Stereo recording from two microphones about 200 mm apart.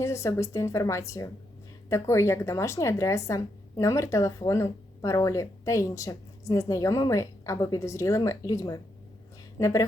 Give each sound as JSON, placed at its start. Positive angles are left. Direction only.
{"t": 0.0, "sound": "a woman's voice", "side_deg": 15}